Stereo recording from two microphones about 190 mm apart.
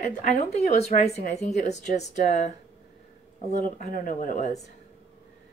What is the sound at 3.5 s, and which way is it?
Speech, 45° left (ahead or behind).